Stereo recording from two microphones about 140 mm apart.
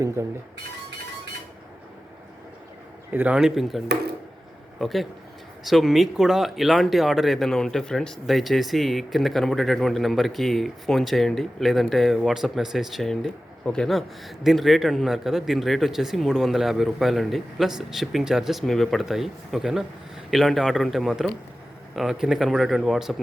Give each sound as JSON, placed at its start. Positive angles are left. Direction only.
{"t": 0.2, "sound": "speech", "side_deg": -20}
{"t": 3.1, "sound": "speech", "side_deg": -10}